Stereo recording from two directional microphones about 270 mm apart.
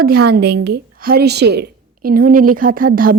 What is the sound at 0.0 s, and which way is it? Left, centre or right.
A woman's voice, right.